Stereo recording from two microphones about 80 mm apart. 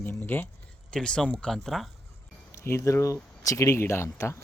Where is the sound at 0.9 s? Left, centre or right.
Centre.